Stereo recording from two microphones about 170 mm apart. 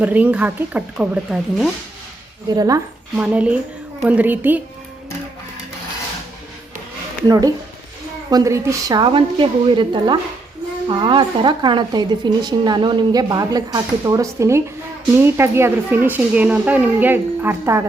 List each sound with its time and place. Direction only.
0.0 s speech: 10° right (ahead or behind)
2.6 s speech: 20° right (ahead or behind)
3.2 s speech: 10° right (ahead or behind)
7.3 s speech: 20° right (ahead or behind)